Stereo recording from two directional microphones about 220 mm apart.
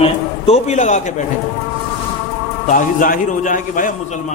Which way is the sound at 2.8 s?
40° left (ahead or behind).